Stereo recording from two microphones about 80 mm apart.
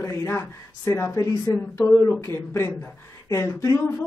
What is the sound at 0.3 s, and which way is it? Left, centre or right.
Speech, left.